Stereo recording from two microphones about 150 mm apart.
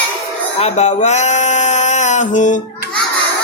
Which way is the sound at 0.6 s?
50° left (ahead or behind).